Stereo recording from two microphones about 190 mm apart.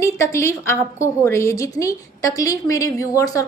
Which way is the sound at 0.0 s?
15° left (ahead or behind).